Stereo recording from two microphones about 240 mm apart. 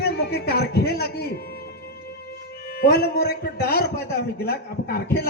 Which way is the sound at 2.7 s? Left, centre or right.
Left.